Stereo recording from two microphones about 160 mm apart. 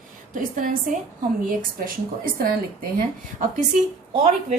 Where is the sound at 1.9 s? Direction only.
60° right (ahead or behind).